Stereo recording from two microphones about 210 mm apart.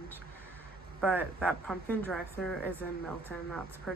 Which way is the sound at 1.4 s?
5° left (ahead or behind).